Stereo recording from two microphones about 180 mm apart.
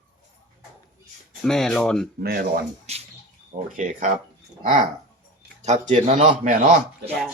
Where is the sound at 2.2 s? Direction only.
60° right (ahead or behind).